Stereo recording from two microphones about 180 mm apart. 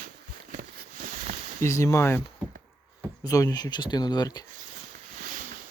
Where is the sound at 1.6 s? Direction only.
15° left (ahead or behind).